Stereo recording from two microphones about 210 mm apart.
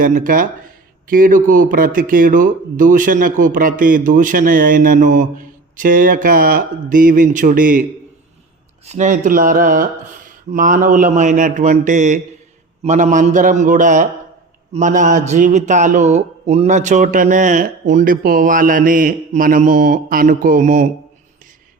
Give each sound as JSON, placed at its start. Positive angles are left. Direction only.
{"t": 0.0, "sound": "speech", "side_deg": -40}
{"t": 8.9, "sound": "speech", "side_deg": -35}